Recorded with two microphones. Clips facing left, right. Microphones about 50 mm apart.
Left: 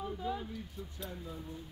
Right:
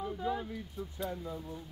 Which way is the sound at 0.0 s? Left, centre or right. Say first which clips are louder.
Right 3 dB; centre.